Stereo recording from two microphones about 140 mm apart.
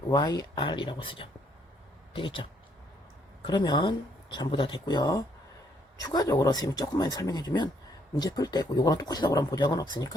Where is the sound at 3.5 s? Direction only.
35° left (ahead or behind).